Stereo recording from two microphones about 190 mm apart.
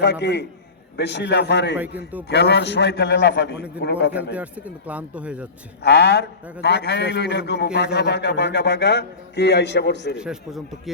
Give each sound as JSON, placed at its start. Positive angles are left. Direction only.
{"t": 0.0, "sound": "a man's voice", "side_deg": 65}
{"t": 4.4, "sound": "speech", "side_deg": -5}
{"t": 5.8, "sound": "a man's voice", "side_deg": 60}
{"t": 10.2, "sound": "a man's voice", "side_deg": -5}